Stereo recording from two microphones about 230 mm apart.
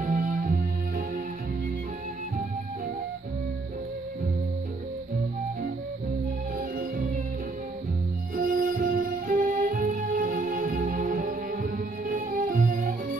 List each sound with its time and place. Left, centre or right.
0.0 s music: right
8.4 s music: right